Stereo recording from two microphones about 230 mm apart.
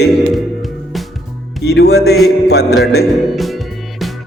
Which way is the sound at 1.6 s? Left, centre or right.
Left.